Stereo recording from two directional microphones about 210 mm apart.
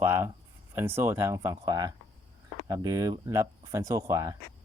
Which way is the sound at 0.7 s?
10° right (ahead or behind).